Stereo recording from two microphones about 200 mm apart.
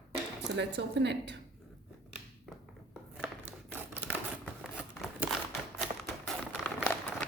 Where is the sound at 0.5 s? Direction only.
60° right (ahead or behind).